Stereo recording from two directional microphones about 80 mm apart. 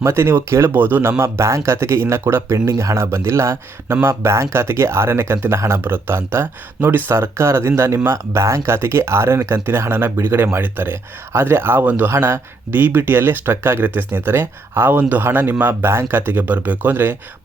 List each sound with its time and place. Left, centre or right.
0.0 s speech: right